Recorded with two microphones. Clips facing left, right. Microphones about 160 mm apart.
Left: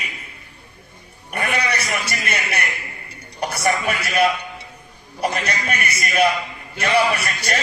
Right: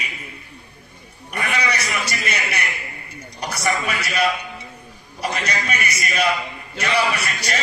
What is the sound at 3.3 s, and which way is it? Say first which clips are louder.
Television: left 2 dB; 55° left (ahead or behind).